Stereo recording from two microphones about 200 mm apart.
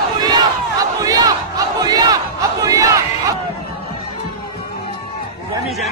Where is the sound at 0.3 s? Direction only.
20° right (ahead or behind).